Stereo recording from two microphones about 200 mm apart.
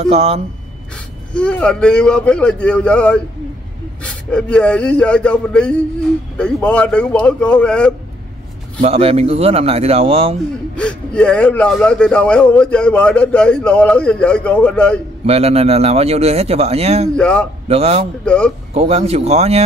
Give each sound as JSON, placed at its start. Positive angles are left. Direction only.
{"t": 0.0, "sound": "speech", "side_deg": -30}
{"t": 0.9, "sound": "speech", "side_deg": 5}
{"t": 8.8, "sound": "speech", "side_deg": -30}
{"t": 10.8, "sound": "speech", "side_deg": 5}
{"t": 15.2, "sound": "speech", "side_deg": -30}
{"t": 17.1, "sound": "speech", "side_deg": 5}
{"t": 17.6, "sound": "speech", "side_deg": -30}
{"t": 18.2, "sound": "speech", "side_deg": 5}
{"t": 18.7, "sound": "speech", "side_deg": -30}